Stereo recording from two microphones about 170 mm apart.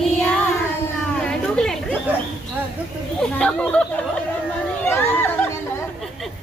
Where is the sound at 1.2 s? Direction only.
5° left (ahead or behind).